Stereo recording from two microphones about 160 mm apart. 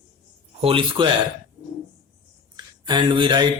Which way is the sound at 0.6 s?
35° right (ahead or behind).